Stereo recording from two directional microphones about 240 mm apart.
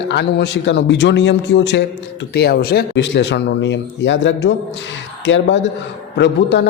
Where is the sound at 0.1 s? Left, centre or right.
Left.